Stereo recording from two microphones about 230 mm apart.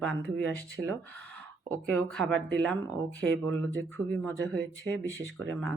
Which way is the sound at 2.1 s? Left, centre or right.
Centre.